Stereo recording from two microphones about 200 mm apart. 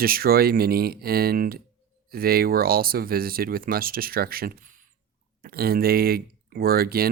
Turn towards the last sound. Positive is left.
turn(degrees=-50)  # may be behind; listen again after turning